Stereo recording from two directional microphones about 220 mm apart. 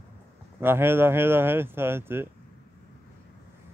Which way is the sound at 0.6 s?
10° right (ahead or behind).